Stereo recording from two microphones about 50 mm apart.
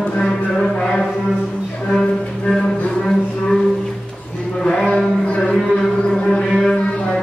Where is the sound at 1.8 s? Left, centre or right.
Centre.